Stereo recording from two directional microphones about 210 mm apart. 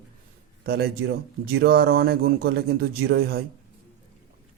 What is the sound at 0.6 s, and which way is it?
Speech, 50° right (ahead or behind).